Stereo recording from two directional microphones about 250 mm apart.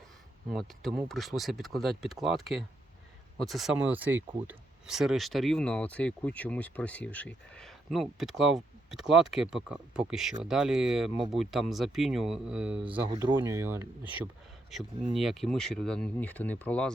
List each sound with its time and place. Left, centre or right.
0.5 s speech: centre
12.8 s speech: centre